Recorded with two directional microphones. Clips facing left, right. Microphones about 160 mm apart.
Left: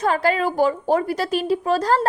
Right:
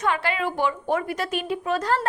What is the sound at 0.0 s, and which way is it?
Speech, 40° left (ahead or behind).